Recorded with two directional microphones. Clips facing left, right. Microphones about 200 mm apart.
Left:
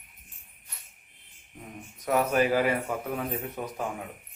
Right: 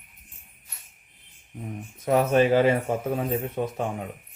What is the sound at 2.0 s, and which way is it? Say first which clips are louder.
Speech: right 4 dB; 25° right (ahead or behind).